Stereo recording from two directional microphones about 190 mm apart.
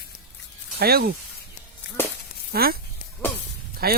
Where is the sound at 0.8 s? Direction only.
55° right (ahead or behind).